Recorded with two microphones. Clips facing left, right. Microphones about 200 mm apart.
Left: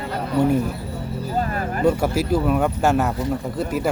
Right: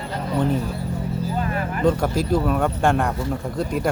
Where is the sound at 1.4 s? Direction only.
40° left (ahead or behind).